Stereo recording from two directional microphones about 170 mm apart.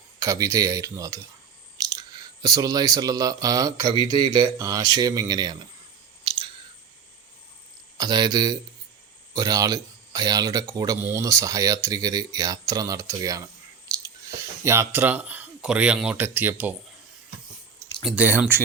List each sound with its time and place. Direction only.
0.2 s speech: 20° right (ahead or behind)
7.9 s speech: 25° right (ahead or behind)
18.0 s speech: 10° right (ahead or behind)